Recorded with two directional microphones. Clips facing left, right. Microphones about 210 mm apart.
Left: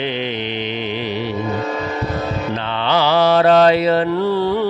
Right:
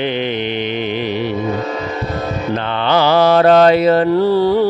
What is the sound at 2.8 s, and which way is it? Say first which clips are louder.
Mantra: right 3 dB; 50° right (ahead or behind).